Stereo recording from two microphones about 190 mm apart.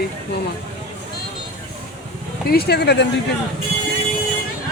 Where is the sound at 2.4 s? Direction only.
55° left (ahead or behind).